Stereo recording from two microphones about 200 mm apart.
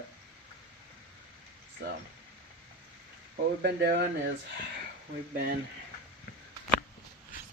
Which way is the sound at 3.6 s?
60° right (ahead or behind).